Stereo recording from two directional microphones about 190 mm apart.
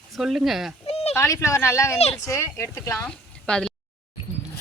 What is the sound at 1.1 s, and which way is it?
A woman's voice, 15° left (ahead or behind).